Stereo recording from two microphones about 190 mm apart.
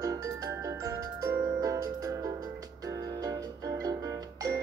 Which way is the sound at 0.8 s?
15° right (ahead or behind).